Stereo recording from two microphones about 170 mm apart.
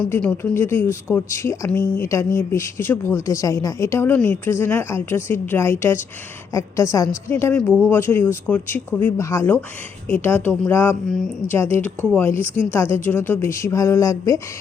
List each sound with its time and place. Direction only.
0.0 s a woman's voice: 10° left (ahead or behind)